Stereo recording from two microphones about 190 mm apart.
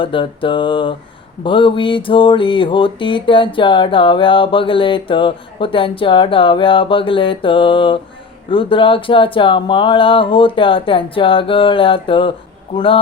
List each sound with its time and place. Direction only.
0.0 s mantra: 25° left (ahead or behind)